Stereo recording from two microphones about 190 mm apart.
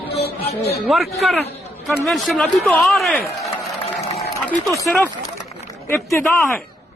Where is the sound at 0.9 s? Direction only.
Centre (ahead or behind).